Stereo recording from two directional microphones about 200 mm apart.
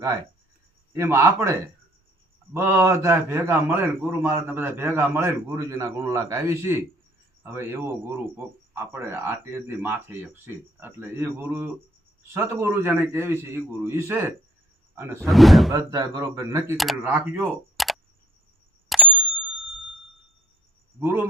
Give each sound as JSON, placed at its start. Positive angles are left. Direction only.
{"t": 0.9, "sound": "a man's voice", "side_deg": -10}
{"t": 15.2, "sound": "speech", "side_deg": 0}
{"t": 15.7, "sound": "a man's voice", "side_deg": -15}
{"t": 16.7, "sound": "speech", "side_deg": 0}
{"t": 18.9, "sound": "bicycle bell", "side_deg": -5}
{"t": 21.0, "sound": "a man's voice", "side_deg": -10}